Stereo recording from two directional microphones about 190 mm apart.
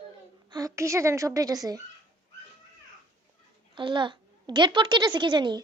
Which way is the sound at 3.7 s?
25° right (ahead or behind).